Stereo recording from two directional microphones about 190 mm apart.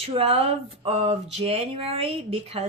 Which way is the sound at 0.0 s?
30° right (ahead or behind).